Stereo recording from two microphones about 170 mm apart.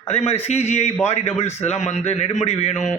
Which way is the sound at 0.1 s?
40° left (ahead or behind).